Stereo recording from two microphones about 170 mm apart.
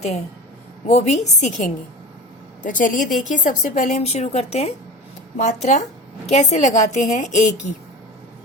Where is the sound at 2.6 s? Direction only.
50° left (ahead or behind).